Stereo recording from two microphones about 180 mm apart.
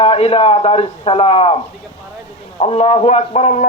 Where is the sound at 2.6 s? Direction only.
35° left (ahead or behind).